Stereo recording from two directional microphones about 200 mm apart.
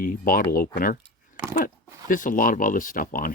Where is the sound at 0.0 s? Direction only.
45° left (ahead or behind).